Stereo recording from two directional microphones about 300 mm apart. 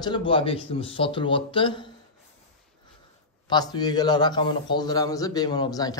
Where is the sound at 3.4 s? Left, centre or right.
Centre.